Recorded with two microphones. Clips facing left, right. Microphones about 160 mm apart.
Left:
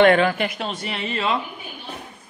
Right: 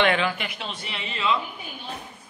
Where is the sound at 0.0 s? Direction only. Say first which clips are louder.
Left 7 dB; 45° left (ahead or behind).